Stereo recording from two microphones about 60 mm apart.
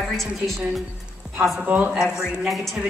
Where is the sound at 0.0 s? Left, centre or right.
Centre.